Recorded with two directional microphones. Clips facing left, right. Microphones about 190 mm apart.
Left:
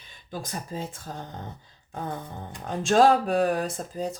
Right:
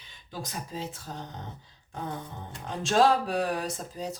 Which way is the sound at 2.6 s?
50° left (ahead or behind).